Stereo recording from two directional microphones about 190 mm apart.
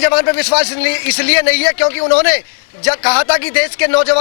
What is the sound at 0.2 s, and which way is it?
Speech, 10° left (ahead or behind).